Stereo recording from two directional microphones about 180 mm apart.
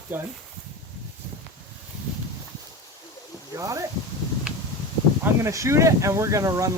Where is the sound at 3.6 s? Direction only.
20° right (ahead or behind).